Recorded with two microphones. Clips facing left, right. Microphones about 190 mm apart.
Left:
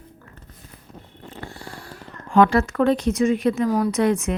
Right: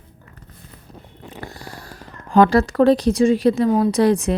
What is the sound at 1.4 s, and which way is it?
Speech, 40° right (ahead or behind).